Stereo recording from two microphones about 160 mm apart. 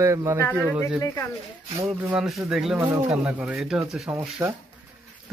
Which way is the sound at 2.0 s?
5° right (ahead or behind).